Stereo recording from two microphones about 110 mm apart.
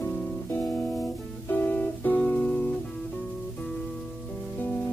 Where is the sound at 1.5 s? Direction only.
20° left (ahead or behind).